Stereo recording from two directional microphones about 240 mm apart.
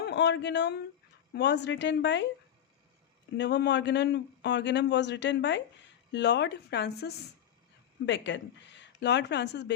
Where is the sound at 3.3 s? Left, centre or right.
Left.